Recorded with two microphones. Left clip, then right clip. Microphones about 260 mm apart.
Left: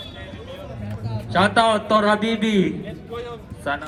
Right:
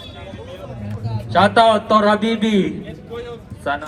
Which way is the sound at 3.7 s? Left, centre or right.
Centre.